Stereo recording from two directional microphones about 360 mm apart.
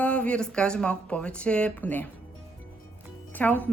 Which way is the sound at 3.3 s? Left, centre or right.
Centre.